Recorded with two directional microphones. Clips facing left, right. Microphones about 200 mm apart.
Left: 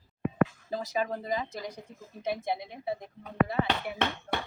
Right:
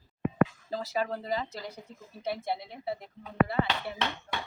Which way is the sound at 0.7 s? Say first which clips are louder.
Even; 10° left (ahead or behind).